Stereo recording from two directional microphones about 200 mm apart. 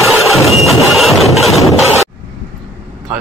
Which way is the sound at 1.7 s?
Centre (ahead or behind).